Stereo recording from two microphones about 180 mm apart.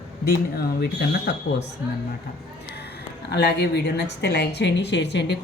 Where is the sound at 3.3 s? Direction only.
65° left (ahead or behind).